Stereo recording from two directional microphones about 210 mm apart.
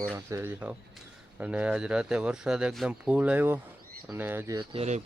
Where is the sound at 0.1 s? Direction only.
10° right (ahead or behind).